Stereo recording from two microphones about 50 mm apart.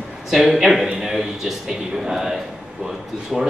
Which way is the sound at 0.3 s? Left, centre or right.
Centre.